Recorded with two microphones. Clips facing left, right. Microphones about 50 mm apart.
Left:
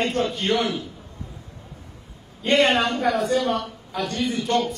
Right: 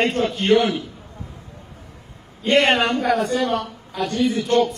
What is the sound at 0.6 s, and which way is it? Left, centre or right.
Speech, right.